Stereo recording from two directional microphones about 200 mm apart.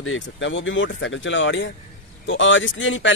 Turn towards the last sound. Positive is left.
turn(degrees=70)  # may be behind; listen again after turning